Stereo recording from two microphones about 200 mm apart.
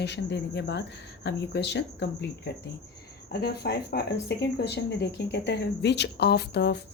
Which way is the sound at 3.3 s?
55° left (ahead or behind).